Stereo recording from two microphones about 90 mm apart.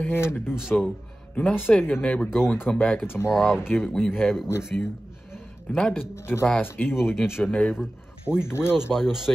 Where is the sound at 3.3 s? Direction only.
5° right (ahead or behind).